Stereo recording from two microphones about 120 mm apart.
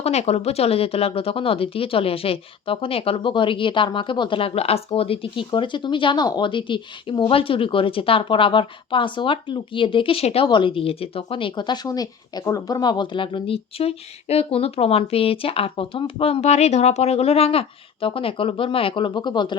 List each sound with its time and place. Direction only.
0.0 s speech: 60° left (ahead or behind); by 19.5 s 40° left (ahead or behind)